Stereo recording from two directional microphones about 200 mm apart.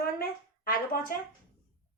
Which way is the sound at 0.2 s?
45° left (ahead or behind).